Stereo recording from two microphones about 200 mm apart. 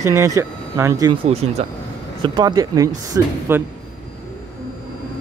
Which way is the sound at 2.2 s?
20° right (ahead or behind).